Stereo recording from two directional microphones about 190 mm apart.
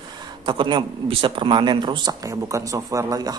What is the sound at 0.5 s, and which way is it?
A man's voice, 25° right (ahead or behind).